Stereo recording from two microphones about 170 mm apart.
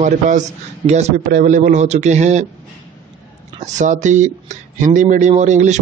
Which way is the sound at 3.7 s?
45° right (ahead or behind).